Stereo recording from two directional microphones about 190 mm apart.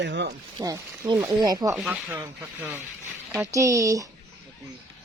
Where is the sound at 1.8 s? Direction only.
5° right (ahead or behind).